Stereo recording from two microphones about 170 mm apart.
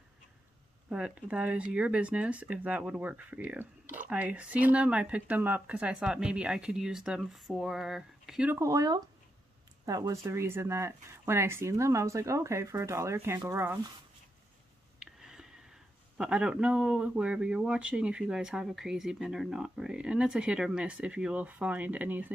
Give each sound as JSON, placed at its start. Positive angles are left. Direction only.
{"t": 0.8, "sound": "speech", "side_deg": -5}
{"t": 8.5, "sound": "speech", "side_deg": -20}
{"t": 15.0, "sound": "a sound", "side_deg": -5}
{"t": 16.2, "sound": "a man's voice", "side_deg": -5}